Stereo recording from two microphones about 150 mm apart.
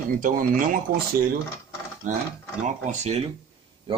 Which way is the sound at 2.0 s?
55° right (ahead or behind).